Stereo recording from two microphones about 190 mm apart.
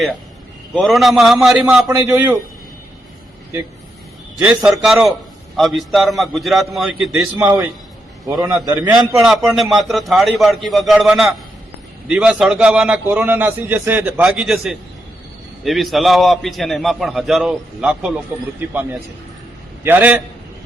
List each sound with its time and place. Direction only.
0.8 s a man's voice: centre (ahead or behind)
4.4 s a man's voice: 5° right (ahead or behind)
19.8 s a man's voice: 10° right (ahead or behind)